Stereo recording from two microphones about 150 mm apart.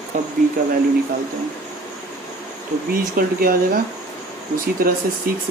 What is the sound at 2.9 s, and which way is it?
Speech, 75° right (ahead or behind).